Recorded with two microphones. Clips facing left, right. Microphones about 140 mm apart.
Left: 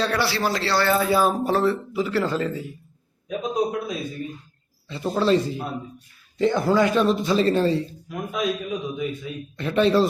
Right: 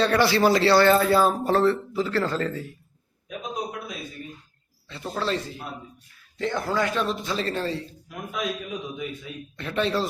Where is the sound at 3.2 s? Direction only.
30° left (ahead or behind).